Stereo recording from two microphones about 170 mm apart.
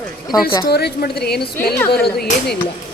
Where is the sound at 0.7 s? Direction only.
65° left (ahead or behind).